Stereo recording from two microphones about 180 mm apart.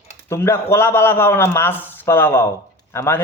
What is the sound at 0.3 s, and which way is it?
Speech, 15° left (ahead or behind).